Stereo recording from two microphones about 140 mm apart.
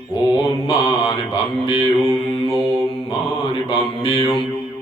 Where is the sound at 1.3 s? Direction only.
40° left (ahead or behind).